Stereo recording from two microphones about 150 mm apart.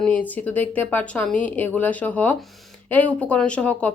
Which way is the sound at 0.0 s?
10° left (ahead or behind).